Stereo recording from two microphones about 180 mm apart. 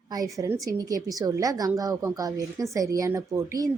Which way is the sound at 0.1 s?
20° right (ahead or behind).